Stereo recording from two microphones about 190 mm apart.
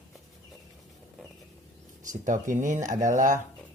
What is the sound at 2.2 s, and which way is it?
Speech, 40° right (ahead or behind).